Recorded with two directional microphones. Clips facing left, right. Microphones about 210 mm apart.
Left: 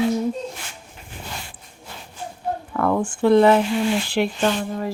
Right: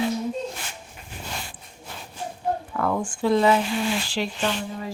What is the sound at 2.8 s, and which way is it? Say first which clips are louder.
Speech: left 7 dB; 55° left (ahead or behind).